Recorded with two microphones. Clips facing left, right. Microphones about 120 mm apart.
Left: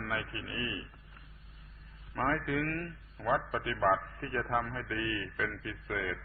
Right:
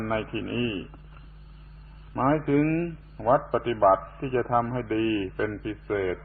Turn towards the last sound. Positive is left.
turn(degrees=-35)  # may be behind; listen again after turning